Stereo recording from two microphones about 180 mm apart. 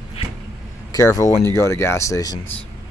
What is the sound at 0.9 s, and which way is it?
Speech, 15° left (ahead or behind).